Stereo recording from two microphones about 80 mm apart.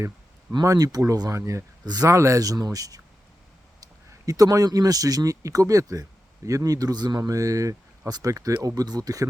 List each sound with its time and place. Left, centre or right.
0.6 s speech: right
1.8 s speech: right
4.3 s speech: right
7.2 s speech: right